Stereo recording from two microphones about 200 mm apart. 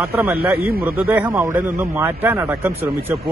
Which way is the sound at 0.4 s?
50° right (ahead or behind).